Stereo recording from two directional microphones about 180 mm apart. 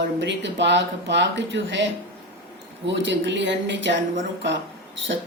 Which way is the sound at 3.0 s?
85° right.